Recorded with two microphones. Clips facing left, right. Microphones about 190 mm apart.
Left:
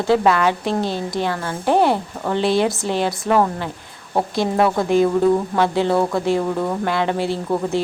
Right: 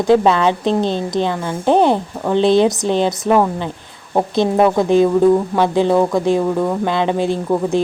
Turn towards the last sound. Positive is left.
turn(degrees=-15)  # may be behind; listen again after turning